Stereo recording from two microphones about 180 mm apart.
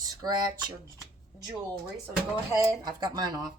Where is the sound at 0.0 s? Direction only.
20° right (ahead or behind).